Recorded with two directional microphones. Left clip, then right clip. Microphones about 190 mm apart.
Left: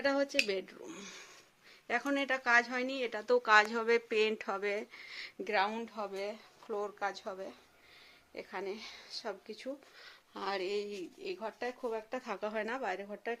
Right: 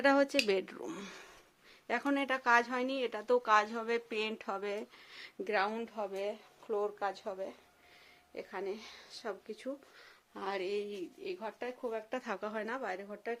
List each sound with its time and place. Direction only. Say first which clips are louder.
0.0 s speech: right 3 dB; 40° right (ahead or behind)
0.9 s a sound: right 3 dB; 25° right (ahead or behind)
1.9 s speech: even; 15° right (ahead or behind); by 11.9 s 10° left (ahead or behind)
12.1 s speech: right 1 dB; 20° right (ahead or behind)
12.4 s speech: left 2 dB; centre (ahead or behind)